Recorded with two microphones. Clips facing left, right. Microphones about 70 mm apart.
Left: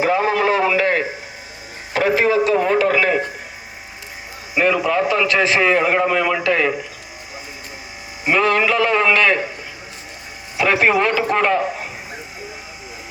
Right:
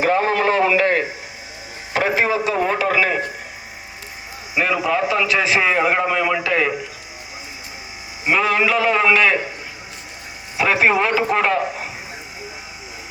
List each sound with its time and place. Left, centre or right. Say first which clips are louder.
0.0 s a sound: even; right
1.9 s speech: left 2 dB; right; by 3.2 s centre
4.5 s a man's voice: left 2 dB; centre
8.2 s a man's voice: left 1 dB; centre
10.6 s a man's voice: left 1 dB; centre